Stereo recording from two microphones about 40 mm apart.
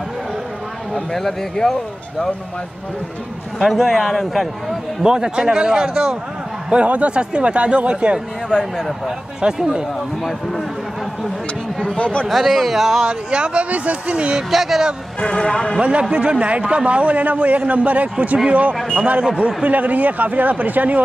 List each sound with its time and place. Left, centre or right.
1.1 s speech: centre
3.9 s a man's voice: centre
5.0 s speech: right
6.7 s speech: right; by 9.8 s centre
12.0 s speech: left
12.3 s a man's voice: centre
13.0 s speech: right
14.5 s speech: centre
15.1 s speech: centre
15.8 s a man's voice: right